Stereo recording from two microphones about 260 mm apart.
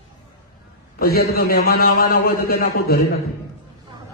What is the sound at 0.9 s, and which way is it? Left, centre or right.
A man's voice, left.